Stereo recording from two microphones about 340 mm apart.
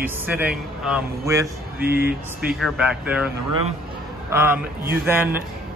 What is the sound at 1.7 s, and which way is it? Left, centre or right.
Speech, right.